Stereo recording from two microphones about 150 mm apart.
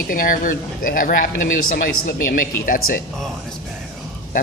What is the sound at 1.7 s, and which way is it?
Speech, 85° left.